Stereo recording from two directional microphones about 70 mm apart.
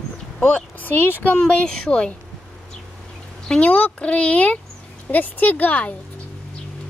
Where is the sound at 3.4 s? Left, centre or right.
Centre.